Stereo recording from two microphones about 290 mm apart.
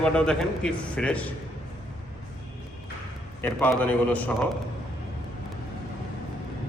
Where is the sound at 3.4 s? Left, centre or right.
Centre.